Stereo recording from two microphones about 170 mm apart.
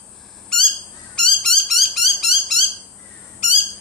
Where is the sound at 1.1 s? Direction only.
Centre (ahead or behind).